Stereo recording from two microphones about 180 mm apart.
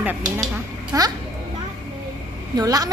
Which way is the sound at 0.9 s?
20° right (ahead or behind).